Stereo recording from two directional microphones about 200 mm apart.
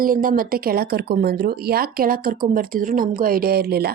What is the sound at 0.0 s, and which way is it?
Speech, 45° right (ahead or behind).